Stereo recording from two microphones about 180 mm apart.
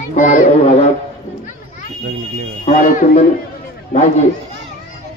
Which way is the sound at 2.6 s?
45° left (ahead or behind).